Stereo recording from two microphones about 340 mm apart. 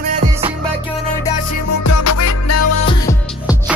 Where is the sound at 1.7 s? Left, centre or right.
Left.